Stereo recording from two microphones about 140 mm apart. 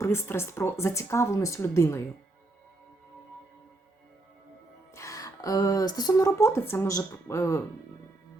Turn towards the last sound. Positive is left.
turn(degrees=20)  # may be behind; listen again after turning